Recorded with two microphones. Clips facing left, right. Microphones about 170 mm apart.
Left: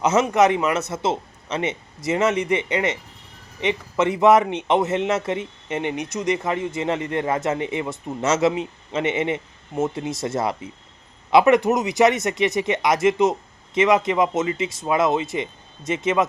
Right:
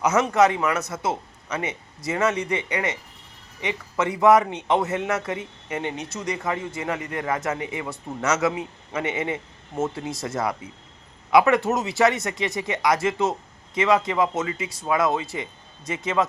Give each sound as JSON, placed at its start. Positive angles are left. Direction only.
{"t": 0.0, "sound": "a man's voice", "side_deg": 25}